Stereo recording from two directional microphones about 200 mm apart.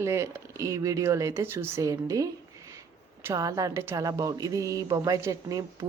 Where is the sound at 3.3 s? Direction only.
15° right (ahead or behind).